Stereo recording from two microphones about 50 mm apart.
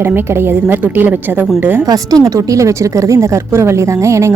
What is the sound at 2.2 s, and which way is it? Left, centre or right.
A woman's voice, right.